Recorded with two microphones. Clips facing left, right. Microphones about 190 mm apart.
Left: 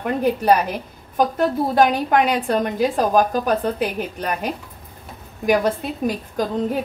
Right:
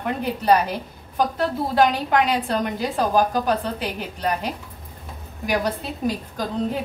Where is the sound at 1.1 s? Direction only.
50° left (ahead or behind).